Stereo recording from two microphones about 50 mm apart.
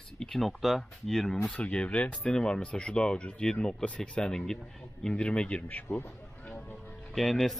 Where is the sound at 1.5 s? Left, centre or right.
Left.